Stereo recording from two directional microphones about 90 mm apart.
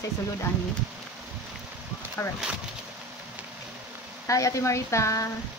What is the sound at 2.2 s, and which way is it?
Speech, 30° left (ahead or behind).